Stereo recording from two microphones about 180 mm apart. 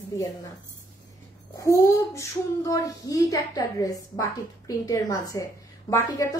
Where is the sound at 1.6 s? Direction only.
15° left (ahead or behind).